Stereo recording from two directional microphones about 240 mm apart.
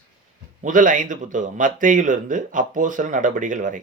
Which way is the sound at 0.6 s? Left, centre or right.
Right.